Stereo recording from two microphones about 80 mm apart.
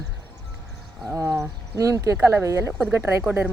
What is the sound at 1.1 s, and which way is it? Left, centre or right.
Speech, right.